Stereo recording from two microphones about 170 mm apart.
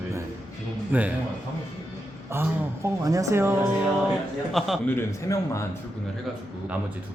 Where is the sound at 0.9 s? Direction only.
10° right (ahead or behind).